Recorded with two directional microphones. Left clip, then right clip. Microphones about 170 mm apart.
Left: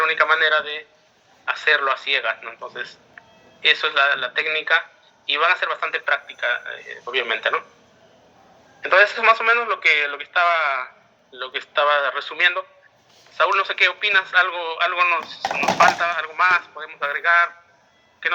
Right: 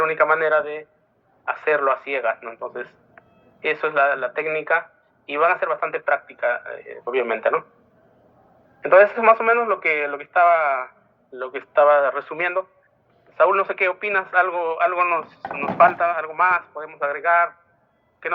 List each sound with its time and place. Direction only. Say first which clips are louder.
0.0 s a man's voice: left 1 dB; 40° right (ahead or behind)
8.8 s a man's voice: right 2 dB; 40° right (ahead or behind)